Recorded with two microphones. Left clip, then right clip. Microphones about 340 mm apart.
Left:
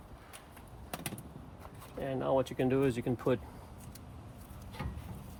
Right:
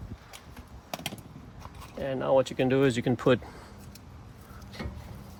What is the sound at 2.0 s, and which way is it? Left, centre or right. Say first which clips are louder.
Speech: right 7 dB; right.